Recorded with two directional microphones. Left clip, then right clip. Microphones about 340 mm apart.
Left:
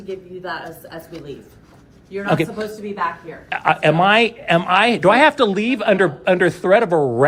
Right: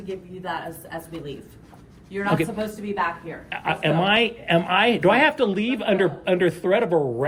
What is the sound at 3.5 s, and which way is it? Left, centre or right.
Speech, centre.